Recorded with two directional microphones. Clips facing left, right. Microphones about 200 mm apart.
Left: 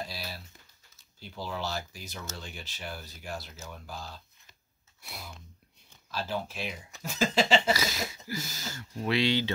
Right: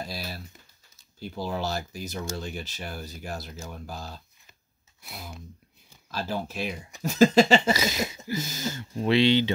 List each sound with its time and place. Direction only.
1.2 s speech: 45° right (ahead or behind)
6.1 s speech: 45° right (ahead or behind)
7.7 s speech: 20° right (ahead or behind)